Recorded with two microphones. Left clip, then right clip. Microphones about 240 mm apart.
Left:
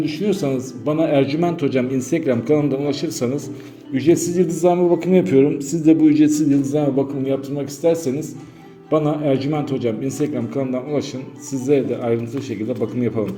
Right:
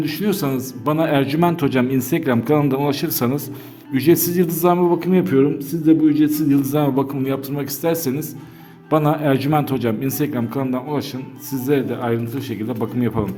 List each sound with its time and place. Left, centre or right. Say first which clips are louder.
0.0 s a man's voice: left 1 dB; right